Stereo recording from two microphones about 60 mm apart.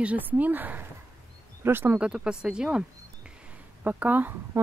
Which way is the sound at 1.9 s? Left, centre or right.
Centre.